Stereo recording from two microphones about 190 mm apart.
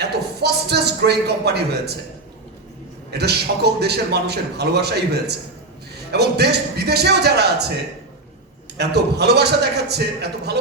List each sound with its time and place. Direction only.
0.0 s a man's voice: 60° right (ahead or behind)
3.1 s a man's voice: 60° right (ahead or behind)
8.8 s a man's voice: 60° right (ahead or behind)